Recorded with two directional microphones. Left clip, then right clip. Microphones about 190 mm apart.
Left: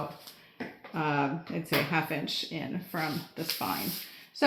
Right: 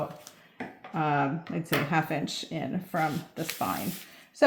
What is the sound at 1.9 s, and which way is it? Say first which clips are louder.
Speech: right 2 dB; 45° right (ahead or behind).